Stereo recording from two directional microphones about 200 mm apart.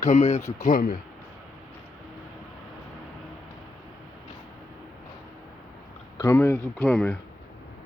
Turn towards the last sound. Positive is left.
turn(degrees=5)  # may be behind; listen again after turning